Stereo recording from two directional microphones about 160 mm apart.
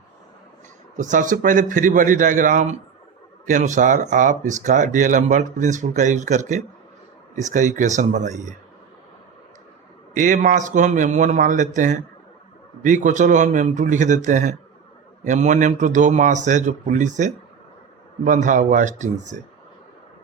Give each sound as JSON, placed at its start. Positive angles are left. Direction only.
{"t": 0.9, "sound": "speech", "side_deg": -50}
{"t": 10.2, "sound": "speech", "side_deg": -50}